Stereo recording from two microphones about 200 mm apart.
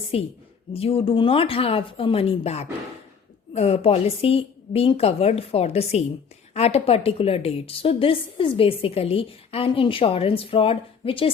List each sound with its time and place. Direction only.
0.1 s a woman's voice: 30° left (ahead or behind)